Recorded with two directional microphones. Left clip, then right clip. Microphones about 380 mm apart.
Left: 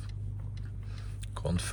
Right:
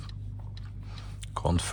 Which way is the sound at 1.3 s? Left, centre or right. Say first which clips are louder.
Right 6 dB; centre.